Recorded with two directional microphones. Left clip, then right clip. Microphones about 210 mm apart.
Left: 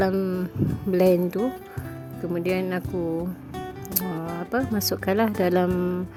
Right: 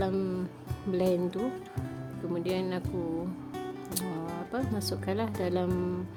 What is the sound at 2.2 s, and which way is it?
Speech, 30° left (ahead or behind).